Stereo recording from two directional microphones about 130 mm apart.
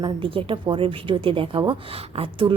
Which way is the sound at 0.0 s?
45° right (ahead or behind).